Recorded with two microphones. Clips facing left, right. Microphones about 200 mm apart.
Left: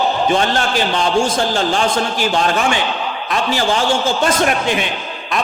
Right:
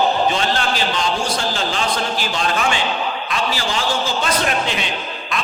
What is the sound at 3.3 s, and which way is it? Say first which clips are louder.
Speech: left 7 dB; 50° left (ahead or behind).